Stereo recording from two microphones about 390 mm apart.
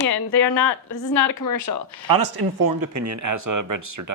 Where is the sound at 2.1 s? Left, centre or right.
Right.